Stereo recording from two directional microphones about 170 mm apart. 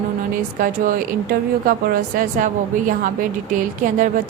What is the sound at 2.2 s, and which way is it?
Speech, 50° right (ahead or behind).